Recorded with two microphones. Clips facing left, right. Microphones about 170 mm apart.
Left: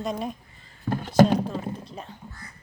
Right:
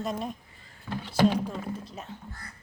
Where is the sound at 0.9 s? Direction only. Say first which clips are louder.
Left 5 dB; 50° left (ahead or behind).